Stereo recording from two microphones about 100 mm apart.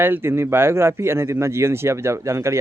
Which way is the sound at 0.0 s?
25° right (ahead or behind).